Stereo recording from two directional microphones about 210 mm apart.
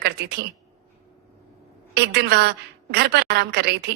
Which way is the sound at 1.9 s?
55° right (ahead or behind).